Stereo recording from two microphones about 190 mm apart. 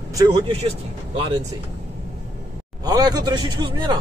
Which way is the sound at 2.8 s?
20° right (ahead or behind).